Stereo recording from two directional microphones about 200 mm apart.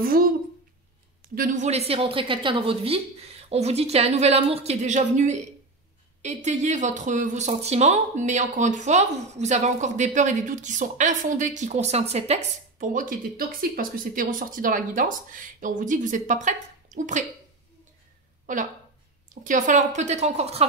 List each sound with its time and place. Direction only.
0.0 s a woman's voice: 50° right (ahead or behind)
1.3 s speech: 40° right (ahead or behind)
18.5 s speech: 40° right (ahead or behind)